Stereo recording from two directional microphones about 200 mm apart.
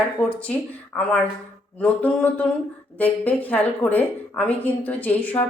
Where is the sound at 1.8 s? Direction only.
5° left (ahead or behind).